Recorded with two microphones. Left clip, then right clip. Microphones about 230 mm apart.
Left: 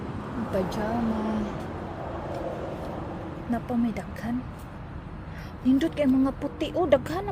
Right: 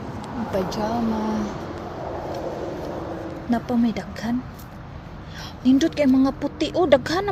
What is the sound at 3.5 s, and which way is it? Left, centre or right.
Speech, centre.